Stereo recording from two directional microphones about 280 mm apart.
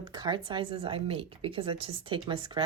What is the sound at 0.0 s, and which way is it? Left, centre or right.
Speech, centre.